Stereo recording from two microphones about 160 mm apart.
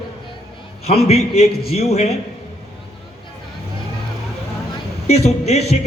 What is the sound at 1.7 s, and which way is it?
Speech, 40° left (ahead or behind).